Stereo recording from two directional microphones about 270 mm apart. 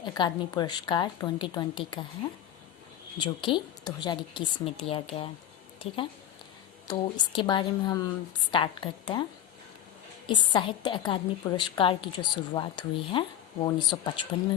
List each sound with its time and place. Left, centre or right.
0.0 s a woman's voice: centre
3.2 s a woman's voice: centre
10.2 s a woman's voice: centre